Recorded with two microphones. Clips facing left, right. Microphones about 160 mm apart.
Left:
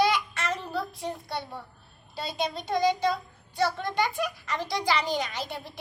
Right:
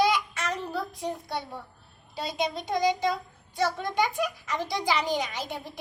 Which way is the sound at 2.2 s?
15° right (ahead or behind).